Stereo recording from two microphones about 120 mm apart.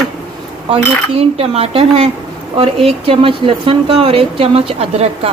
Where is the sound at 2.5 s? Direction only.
50° right (ahead or behind).